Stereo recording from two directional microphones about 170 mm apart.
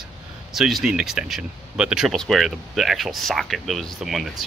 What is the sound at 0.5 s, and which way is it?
Speech, centre (ahead or behind).